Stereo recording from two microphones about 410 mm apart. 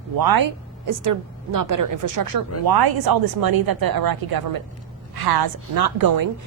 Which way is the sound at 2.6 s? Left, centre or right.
Right.